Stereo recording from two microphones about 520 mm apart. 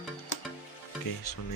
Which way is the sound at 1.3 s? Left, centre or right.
Left.